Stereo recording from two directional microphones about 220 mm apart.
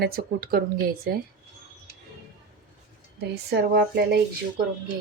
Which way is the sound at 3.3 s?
45° right (ahead or behind).